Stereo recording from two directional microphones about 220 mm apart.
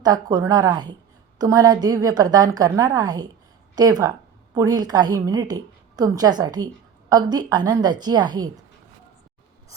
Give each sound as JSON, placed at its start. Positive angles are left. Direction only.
{"t": 0.0, "sound": "a woman's voice", "side_deg": -15}